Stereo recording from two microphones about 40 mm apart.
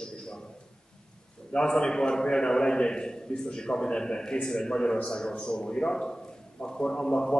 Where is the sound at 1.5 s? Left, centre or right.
Left.